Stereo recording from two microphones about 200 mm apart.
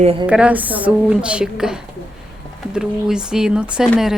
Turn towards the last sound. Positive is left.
turn(degrees=0)  # may be behind; listen again after turning